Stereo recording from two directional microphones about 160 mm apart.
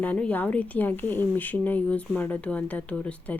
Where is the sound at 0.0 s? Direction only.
10° left (ahead or behind).